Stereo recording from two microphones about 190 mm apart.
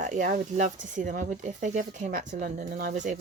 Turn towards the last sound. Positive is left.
turn(degrees=-45)  # may be behind; listen again after turning